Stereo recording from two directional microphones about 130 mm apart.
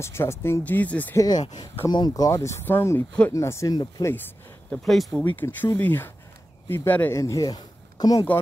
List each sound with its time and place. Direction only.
0.0 s speech: 20° left (ahead or behind)
1.1 s speech: 30° left (ahead or behind)
4.6 s speech: 5° left (ahead or behind)
5.2 s speech: 15° left (ahead or behind); by 8.3 s 30° left (ahead or behind)